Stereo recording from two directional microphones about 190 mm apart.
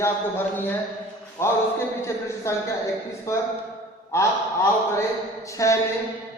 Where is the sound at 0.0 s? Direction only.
10° left (ahead or behind).